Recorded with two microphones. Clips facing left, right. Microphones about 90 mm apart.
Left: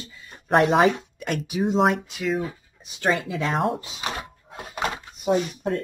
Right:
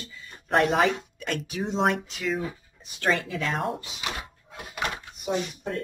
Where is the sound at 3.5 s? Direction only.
Centre (ahead or behind).